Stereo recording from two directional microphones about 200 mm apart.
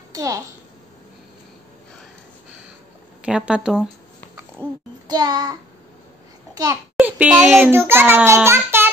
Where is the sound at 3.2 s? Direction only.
5° right (ahead or behind).